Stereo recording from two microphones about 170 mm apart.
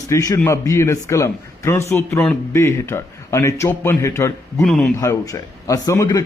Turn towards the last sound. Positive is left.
turn(degrees=20)  # may be behind; listen again after turning